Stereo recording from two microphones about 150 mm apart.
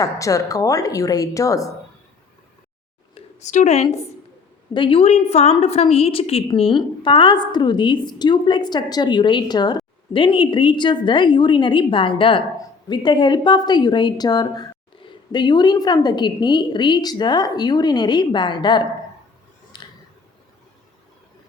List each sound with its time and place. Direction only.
0.0 s a woman's voice: 20° left (ahead or behind)
3.2 s speech: 50° left (ahead or behind)
4.7 s a woman's voice: 35° left (ahead or behind)
19.7 s a sound: 30° left (ahead or behind)